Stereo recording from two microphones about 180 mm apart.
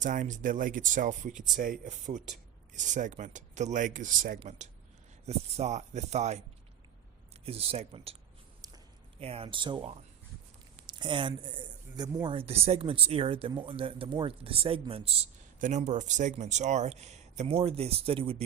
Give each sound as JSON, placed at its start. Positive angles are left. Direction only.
{"t": 0.0, "sound": "speech", "side_deg": -45}
{"t": 7.4, "sound": "speech", "side_deg": -35}
{"t": 9.2, "sound": "speech", "side_deg": -30}
{"t": 15.5, "sound": "speech", "side_deg": -45}